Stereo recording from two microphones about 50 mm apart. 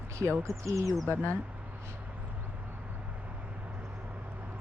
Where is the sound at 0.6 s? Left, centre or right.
Right.